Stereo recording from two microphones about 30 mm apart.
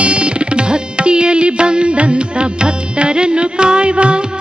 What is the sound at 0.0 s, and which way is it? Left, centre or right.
Music, right.